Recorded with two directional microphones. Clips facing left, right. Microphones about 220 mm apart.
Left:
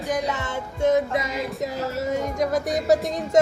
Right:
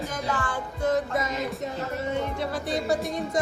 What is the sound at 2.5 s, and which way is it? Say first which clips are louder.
Music: left 8 dB; 45° left (ahead or behind).